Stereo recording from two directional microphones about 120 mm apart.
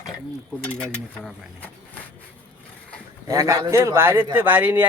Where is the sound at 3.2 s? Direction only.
30° right (ahead or behind).